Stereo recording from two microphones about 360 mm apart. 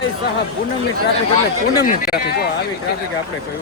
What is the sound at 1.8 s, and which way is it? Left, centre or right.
Speech, left.